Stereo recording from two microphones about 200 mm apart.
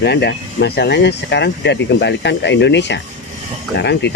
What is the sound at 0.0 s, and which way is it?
Speech, 55° left (ahead or behind).